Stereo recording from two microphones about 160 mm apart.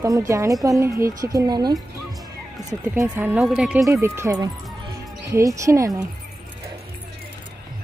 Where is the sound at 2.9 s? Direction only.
10° right (ahead or behind).